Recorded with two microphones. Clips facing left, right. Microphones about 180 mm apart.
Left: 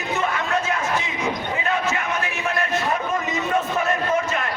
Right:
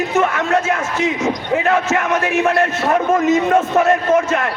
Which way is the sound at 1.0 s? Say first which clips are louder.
Right 7 dB; 75° right (ahead or behind).